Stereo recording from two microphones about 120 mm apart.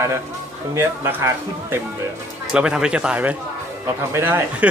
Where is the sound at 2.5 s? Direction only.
5° right (ahead or behind).